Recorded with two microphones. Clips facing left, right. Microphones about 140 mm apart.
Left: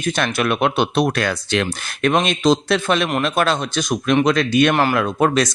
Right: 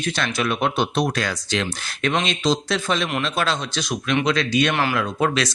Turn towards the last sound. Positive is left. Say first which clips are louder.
# left 5 dB
turn(degrees=45)  # may be behind; listen again after turning